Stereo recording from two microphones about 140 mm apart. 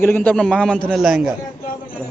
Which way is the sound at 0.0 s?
10° left (ahead or behind).